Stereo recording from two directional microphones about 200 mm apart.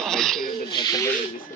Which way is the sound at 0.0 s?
Centre (ahead or behind).